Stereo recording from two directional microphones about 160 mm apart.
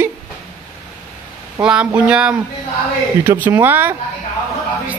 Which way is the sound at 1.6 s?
5° right (ahead or behind).